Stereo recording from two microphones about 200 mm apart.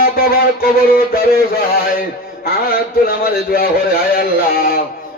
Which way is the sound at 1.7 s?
45° left (ahead or behind).